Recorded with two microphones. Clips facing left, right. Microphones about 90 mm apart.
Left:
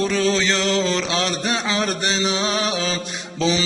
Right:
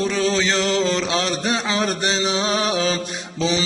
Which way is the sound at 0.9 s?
25° right (ahead or behind).